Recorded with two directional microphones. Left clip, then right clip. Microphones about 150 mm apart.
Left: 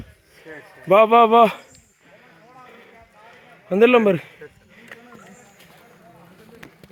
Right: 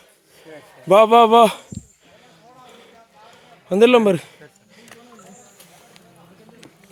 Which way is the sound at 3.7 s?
15° right (ahead or behind).